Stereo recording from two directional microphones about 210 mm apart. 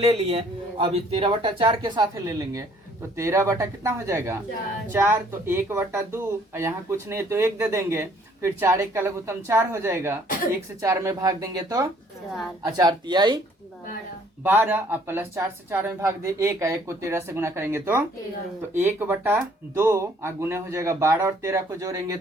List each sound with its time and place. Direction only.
0.0 s a man's voice: 30° right (ahead or behind)
14.4 s speech: 10° right (ahead or behind)